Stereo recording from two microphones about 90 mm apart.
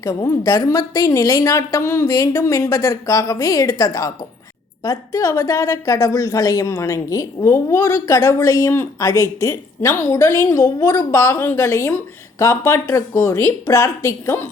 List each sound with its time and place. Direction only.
0.0 s a woman's voice: 40° left (ahead or behind)